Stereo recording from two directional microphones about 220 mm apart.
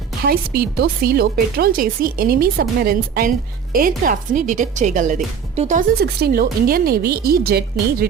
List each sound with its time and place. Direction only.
0.3 s speech: 45° right (ahead or behind)
6.0 s speech: 45° right (ahead or behind)